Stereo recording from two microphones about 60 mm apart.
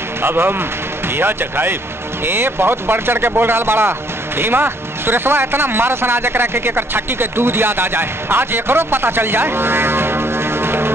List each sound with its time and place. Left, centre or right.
0.2 s speech: right